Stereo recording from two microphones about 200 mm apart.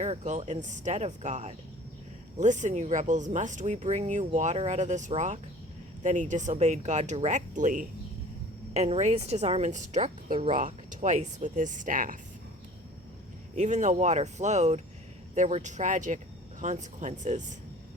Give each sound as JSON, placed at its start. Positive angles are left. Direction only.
{"t": 0.0, "sound": "speech", "side_deg": -35}
{"t": 13.6, "sound": "speech", "side_deg": -35}